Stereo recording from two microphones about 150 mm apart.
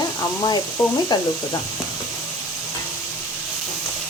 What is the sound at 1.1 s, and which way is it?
Speech, 30° left (ahead or behind).